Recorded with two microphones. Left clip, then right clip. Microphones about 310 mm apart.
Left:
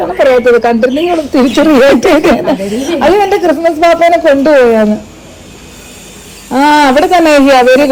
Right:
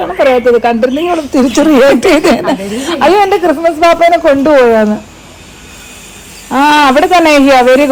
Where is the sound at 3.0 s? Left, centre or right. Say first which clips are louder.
Right 1 dB; centre.